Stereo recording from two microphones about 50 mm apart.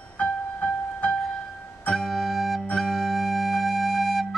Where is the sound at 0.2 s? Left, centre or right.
Left.